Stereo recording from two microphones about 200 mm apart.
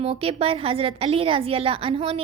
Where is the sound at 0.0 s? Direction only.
30° right (ahead or behind).